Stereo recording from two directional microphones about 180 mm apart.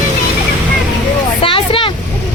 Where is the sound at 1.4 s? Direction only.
30° left (ahead or behind).